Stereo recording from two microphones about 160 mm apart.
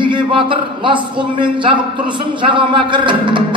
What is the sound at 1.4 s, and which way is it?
Speech, 30° right (ahead or behind).